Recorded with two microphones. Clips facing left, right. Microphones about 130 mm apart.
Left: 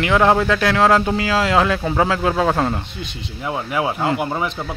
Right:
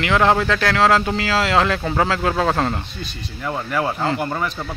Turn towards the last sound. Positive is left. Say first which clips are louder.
# left 1 dB
turn(degrees=10)  # may be behind; listen again after turning